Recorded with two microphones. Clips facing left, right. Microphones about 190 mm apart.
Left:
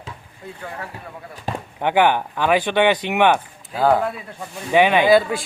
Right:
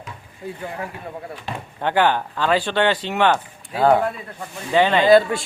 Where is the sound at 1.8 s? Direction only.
15° left (ahead or behind).